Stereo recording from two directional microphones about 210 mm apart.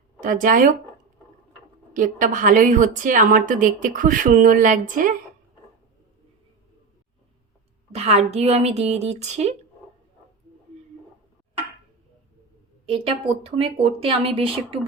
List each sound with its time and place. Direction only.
0.2 s a woman's voice: 40° right (ahead or behind)
1.9 s a woman's voice: 40° right (ahead or behind)
7.9 s a woman's voice: 30° right (ahead or behind)
12.8 s speech: 25° right (ahead or behind)